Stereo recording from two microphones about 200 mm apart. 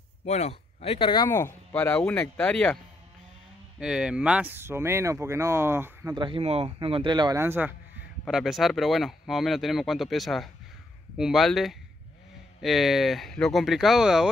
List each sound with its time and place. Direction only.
0.2 s speech: 30° left (ahead or behind); by 2.8 s 5° left (ahead or behind)
3.8 s speech: 5° right (ahead or behind)